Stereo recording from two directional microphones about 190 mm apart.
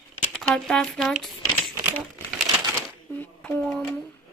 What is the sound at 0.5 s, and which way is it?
Speech, 5° left (ahead or behind).